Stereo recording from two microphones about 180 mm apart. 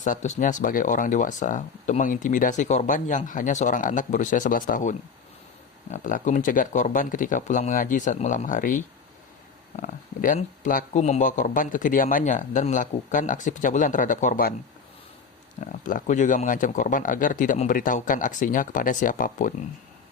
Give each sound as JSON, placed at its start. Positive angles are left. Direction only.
{"t": 0.0, "sound": "speech", "side_deg": 40}
{"t": 15.6, "sound": "speech", "side_deg": 45}